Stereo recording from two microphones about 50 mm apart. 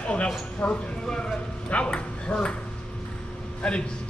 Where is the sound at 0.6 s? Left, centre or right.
Left.